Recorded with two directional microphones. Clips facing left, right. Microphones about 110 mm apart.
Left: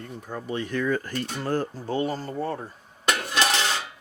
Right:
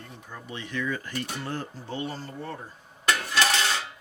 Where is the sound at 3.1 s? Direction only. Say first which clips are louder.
Left 1 dB; 20° left (ahead or behind).